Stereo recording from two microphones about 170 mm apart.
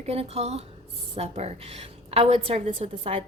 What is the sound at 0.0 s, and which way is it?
A woman's voice, 35° right (ahead or behind).